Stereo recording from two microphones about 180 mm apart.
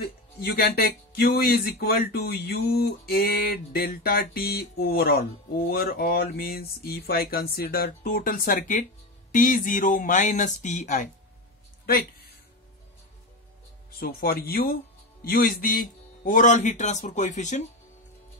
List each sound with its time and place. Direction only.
0.0 s speech: 60° left (ahead or behind); by 11.1 s 45° left (ahead or behind)
13.9 s speech: 55° left (ahead or behind)